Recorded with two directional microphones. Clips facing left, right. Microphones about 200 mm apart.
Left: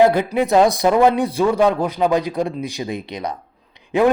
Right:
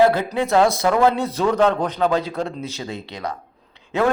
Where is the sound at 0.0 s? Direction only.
15° left (ahead or behind).